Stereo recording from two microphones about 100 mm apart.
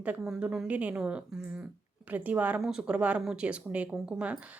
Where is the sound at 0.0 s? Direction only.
15° right (ahead or behind).